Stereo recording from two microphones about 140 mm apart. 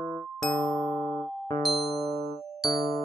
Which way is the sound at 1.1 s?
35° left (ahead or behind).